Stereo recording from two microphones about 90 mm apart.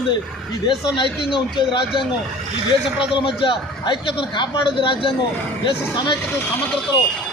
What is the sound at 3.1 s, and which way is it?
Speech, 60° left (ahead or behind).